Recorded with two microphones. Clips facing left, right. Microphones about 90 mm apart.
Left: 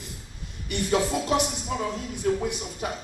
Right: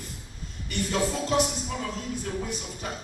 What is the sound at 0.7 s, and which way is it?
Music, 20° left (ahead or behind).